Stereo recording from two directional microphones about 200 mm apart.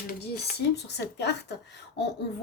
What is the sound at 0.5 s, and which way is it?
Speech, 55° left (ahead or behind).